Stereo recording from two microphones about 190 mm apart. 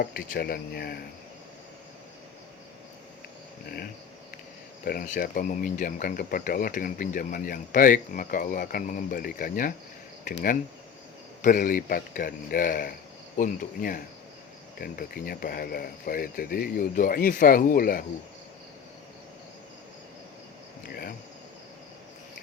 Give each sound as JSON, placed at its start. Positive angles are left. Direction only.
{"t": 0.0, "sound": "speech", "side_deg": 55}
{"t": 4.9, "sound": "speech", "side_deg": 45}
{"t": 11.4, "sound": "speech", "side_deg": 45}